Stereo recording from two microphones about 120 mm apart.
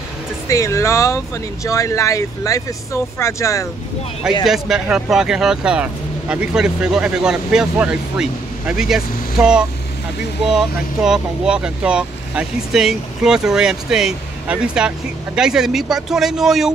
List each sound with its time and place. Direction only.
0.5 s speech: 25° left (ahead or behind)
4.5 s speech: 5° right (ahead or behind)